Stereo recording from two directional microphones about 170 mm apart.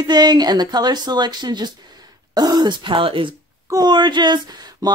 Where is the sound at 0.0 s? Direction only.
25° right (ahead or behind).